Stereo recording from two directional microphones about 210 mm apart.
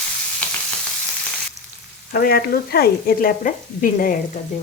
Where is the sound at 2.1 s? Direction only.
45° left (ahead or behind).